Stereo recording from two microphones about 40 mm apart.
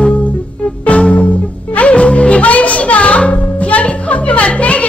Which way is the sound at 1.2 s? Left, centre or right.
Left.